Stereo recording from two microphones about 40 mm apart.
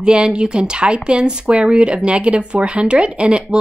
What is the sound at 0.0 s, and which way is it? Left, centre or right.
Speech, right.